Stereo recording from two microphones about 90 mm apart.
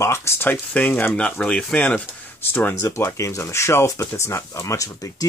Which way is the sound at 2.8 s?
35° left (ahead or behind).